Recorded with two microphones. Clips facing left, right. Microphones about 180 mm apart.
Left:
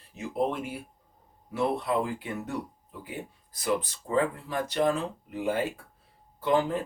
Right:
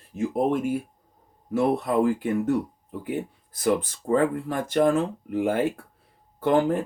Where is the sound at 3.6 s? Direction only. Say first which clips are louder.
Right 6 dB; 50° right (ahead or behind).